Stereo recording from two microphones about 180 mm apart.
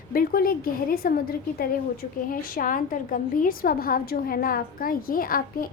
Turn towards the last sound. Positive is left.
turn(degrees=50)  # may be behind; listen again after turning